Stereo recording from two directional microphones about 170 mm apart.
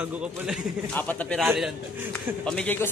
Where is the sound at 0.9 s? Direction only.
10° left (ahead or behind).